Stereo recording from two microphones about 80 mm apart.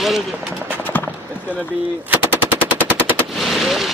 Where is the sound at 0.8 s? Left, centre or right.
Left.